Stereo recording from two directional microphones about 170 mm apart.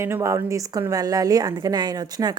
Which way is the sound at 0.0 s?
15° right (ahead or behind).